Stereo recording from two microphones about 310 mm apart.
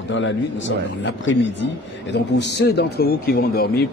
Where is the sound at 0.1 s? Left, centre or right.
Left.